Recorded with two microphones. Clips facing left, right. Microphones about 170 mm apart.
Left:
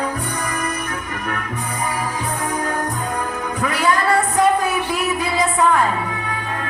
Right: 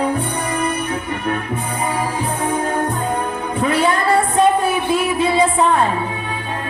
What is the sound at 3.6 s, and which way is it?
Music, 25° right (ahead or behind).